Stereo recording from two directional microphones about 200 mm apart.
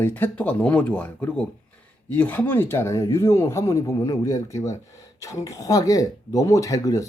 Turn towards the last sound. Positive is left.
turn(degrees=15)  # may be behind; listen again after turning